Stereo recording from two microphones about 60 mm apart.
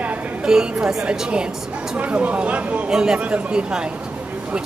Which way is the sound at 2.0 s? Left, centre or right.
Right.